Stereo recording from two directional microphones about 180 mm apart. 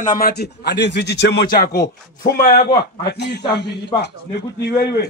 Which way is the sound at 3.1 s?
70° left (ahead or behind).